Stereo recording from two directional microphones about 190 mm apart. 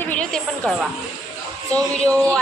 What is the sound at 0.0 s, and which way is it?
Music, 5° left (ahead or behind).